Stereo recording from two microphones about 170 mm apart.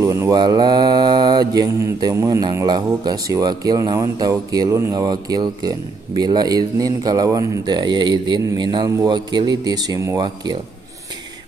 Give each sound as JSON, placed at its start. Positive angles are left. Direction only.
{"t": 0.0, "sound": "mantra", "side_deg": -20}